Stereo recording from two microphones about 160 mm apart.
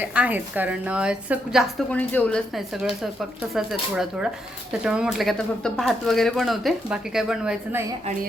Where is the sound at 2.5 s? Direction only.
Centre (ahead or behind).